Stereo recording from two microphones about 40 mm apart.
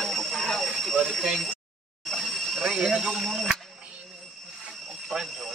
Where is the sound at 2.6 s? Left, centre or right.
Centre.